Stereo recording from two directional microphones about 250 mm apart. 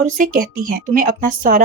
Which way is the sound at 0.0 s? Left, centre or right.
Right.